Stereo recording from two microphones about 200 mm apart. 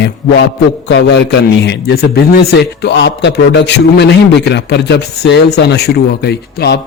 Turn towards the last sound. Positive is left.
turn(degrees=55)  # may be behind; listen again after turning